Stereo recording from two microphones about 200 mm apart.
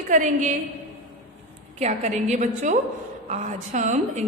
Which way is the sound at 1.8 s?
35° right (ahead or behind).